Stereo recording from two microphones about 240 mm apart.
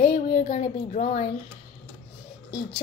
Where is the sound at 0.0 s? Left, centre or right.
Left.